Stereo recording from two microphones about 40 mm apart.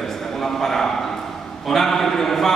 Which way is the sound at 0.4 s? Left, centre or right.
Centre.